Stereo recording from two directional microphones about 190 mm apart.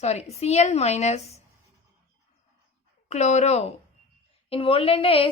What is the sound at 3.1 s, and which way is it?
A woman's voice, 35° left (ahead or behind).